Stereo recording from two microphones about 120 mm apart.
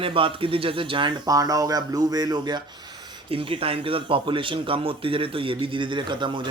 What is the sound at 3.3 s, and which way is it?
Speech, 50° right (ahead or behind).